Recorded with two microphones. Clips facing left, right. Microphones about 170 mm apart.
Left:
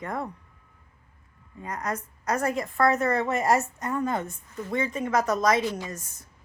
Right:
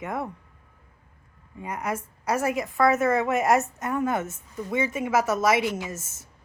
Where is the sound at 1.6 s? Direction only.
10° right (ahead or behind).